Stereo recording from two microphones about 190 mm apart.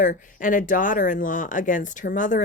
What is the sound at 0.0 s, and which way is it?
Speech, 45° left (ahead or behind).